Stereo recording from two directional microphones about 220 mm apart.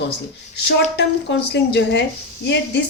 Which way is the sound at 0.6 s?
50° left (ahead or behind).